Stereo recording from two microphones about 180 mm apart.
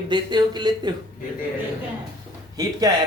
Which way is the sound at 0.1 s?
25° right (ahead or behind).